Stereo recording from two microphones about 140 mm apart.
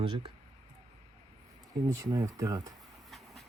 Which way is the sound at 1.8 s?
25° right (ahead or behind).